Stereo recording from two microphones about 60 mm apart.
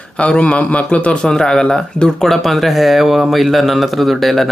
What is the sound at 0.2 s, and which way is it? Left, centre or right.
Speech, centre.